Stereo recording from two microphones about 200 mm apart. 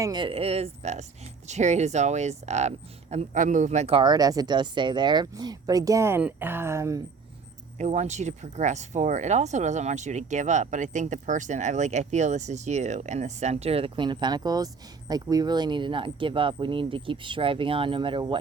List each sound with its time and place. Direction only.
0.0 s speech: 20° right (ahead or behind)
7.8 s speech: 35° right (ahead or behind)